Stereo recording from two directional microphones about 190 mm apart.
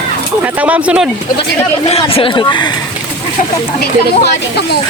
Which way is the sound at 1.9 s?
30° left (ahead or behind).